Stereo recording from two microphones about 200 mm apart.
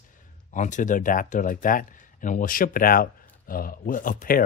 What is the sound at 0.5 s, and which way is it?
Speech, 40° left (ahead or behind).